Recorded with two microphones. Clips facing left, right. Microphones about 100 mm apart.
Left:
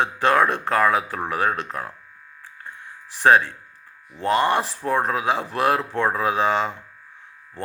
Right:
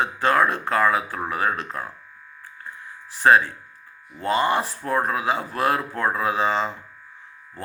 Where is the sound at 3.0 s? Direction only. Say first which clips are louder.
Even; 70° left (ahead or behind).